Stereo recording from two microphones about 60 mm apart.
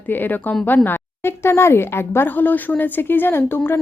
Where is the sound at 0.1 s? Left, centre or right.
Left.